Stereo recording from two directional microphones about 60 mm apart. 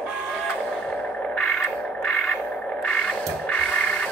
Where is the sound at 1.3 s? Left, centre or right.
Centre.